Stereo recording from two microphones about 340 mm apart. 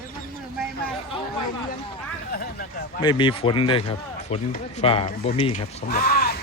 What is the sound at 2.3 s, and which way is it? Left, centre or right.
Speech, left.